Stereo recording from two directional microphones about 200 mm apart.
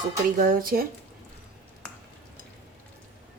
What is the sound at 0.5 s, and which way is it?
Speech, 50° right (ahead or behind).